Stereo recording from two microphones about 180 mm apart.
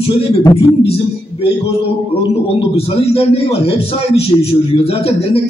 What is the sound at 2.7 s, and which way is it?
A man's voice, 30° left (ahead or behind).